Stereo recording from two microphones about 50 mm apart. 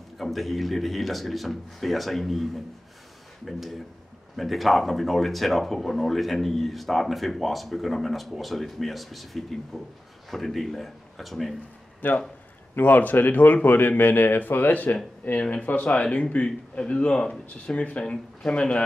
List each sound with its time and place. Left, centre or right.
0.2 s speech: centre
12.0 s speech: left